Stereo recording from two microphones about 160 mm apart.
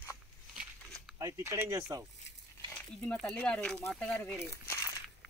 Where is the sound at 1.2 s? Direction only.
20° right (ahead or behind).